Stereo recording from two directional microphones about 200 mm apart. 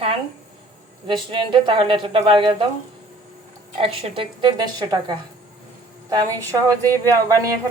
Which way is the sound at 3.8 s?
25° right (ahead or behind).